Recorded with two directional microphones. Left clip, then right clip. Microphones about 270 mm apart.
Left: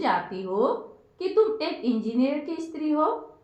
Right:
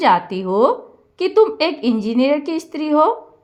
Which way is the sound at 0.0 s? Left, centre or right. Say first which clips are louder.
Right 11 dB; right.